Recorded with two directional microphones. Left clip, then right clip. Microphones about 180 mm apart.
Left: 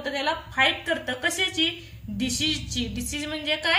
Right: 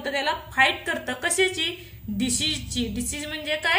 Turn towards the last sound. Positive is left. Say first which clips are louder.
# even
turn(degrees=-15)  # may be behind; listen again after turning